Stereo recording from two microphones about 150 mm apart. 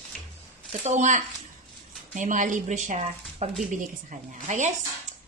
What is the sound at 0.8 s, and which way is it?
Speech, 55° right (ahead or behind).